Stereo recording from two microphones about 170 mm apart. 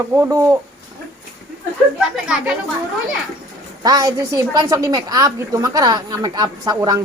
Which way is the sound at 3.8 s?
20° right (ahead or behind).